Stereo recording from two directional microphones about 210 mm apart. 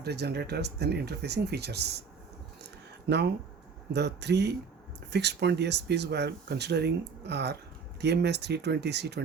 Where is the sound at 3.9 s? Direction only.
55° right (ahead or behind).